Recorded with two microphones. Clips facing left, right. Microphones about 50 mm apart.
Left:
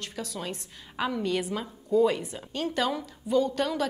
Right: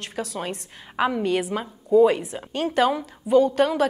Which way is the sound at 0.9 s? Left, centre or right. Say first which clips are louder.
Right 6 dB; right.